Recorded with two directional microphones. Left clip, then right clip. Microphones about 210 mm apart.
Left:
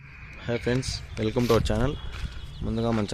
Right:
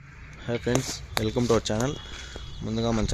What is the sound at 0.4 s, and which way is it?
Speech, centre (ahead or behind).